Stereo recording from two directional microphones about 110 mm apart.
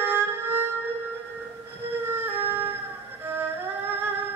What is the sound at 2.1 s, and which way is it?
Emergency vehicle, 20° right (ahead or behind).